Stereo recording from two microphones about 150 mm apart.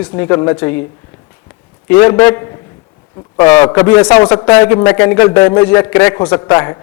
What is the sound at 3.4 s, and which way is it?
A man's voice, 30° left (ahead or behind).